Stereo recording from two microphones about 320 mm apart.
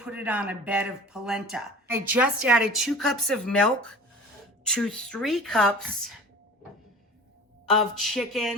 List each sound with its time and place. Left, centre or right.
0.0 s speech: centre
7.7 s speech: centre